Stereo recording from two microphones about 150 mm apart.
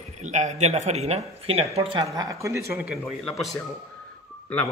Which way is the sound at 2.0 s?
20° right (ahead or behind).